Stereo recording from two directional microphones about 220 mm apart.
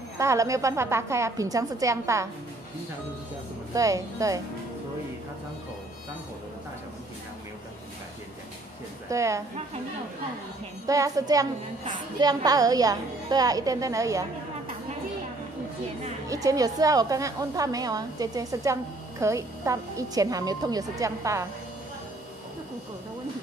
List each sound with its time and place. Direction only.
0.2 s a woman's voice: 15° right (ahead or behind)
3.7 s a woman's voice: 15° right (ahead or behind)
9.1 s a woman's voice: 15° right (ahead or behind)
10.9 s a woman's voice: 15° right (ahead or behind)
16.3 s a woman's voice: 15° right (ahead or behind)